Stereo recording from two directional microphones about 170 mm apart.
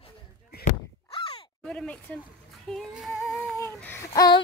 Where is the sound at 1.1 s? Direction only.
30° left (ahead or behind).